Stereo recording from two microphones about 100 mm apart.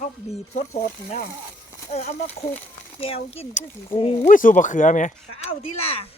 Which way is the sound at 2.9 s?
75° left (ahead or behind).